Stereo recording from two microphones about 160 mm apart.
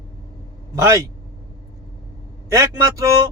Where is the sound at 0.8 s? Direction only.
20° right (ahead or behind).